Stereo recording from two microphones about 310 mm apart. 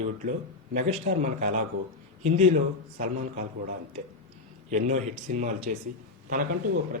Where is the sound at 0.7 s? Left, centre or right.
Right.